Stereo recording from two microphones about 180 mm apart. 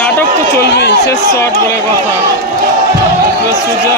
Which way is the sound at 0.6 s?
70° left (ahead or behind).